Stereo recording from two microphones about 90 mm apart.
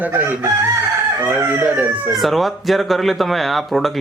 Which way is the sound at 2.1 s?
Centre (ahead or behind).